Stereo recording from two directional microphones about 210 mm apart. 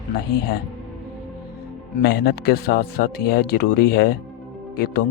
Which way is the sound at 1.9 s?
50° left (ahead or behind).